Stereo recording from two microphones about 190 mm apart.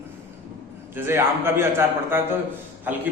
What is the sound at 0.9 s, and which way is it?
A man's voice, 10° right (ahead or behind).